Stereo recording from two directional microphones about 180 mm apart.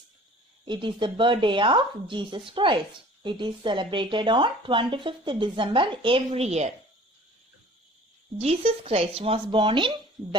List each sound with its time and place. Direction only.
0.6 s speech: 25° right (ahead or behind)
8.4 s speech: 35° right (ahead or behind)